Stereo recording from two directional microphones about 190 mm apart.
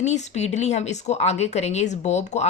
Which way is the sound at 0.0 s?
35° left (ahead or behind).